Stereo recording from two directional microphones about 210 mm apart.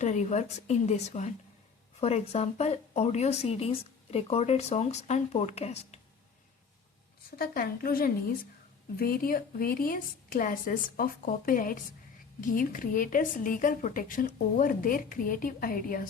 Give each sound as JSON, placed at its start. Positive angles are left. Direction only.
{"t": 0.0, "sound": "speech", "side_deg": 35}
{"t": 7.3, "sound": "a woman's voice", "side_deg": 45}